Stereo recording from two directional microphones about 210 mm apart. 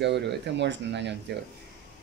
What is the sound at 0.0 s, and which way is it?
Speech, 55° right (ahead or behind).